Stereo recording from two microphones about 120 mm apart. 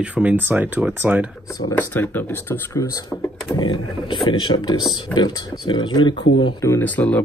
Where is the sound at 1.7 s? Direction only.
15° left (ahead or behind).